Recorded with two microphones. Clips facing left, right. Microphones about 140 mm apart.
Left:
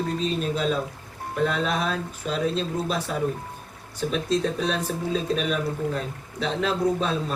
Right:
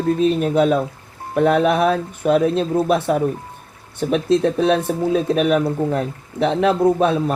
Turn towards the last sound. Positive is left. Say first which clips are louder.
# right 8 dB
turn(degrees=-65)  # may be behind; listen again after turning